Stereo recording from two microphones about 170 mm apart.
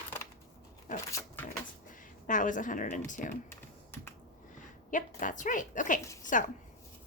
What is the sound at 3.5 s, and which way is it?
Computer keyboard, 15° left (ahead or behind).